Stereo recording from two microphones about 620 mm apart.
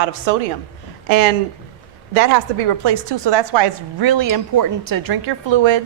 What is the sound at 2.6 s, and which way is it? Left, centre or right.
A woman's voice, right.